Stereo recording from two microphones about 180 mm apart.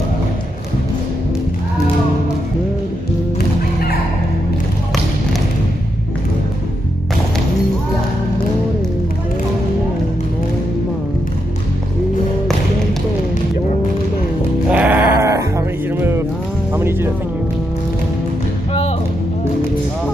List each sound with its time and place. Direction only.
14.7 s music: 10° right (ahead or behind)
18.7 s music: 35° left (ahead or behind)